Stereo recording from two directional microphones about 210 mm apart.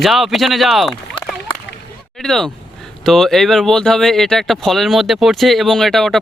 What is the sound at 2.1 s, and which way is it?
Speech, centre (ahead or behind).